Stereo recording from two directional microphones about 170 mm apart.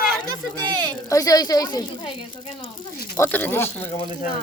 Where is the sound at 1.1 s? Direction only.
20° left (ahead or behind).